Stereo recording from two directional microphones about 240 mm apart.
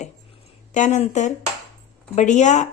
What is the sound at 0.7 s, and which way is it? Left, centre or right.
A woman's voice, left.